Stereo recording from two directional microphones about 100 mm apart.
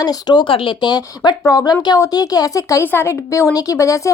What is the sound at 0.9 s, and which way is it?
Speech, 45° left (ahead or behind).